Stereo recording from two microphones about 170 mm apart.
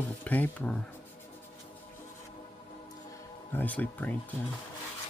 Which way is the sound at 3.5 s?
10° left (ahead or behind).